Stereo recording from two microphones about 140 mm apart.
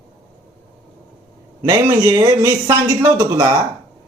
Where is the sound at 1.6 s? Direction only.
35° right (ahead or behind).